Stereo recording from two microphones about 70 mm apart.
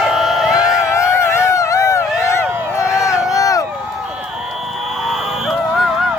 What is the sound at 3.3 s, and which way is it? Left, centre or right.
Run, left.